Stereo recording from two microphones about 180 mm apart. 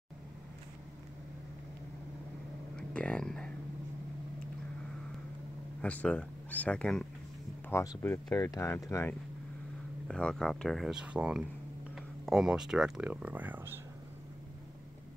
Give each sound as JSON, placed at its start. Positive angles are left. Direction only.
{"t": 2.7, "sound": "a sound", "side_deg": 5}
{"t": 5.8, "sound": "speech", "side_deg": 5}
{"t": 7.7, "sound": "speech", "side_deg": 15}